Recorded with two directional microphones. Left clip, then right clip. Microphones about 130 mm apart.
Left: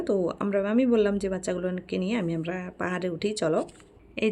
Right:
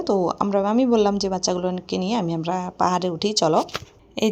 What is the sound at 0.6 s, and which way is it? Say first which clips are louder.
Speech: right 4 dB; 20° right (ahead or behind).